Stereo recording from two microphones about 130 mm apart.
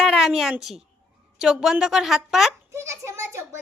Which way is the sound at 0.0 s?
5° right (ahead or behind).